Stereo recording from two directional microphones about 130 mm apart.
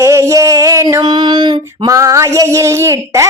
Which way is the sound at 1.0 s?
35° right (ahead or behind).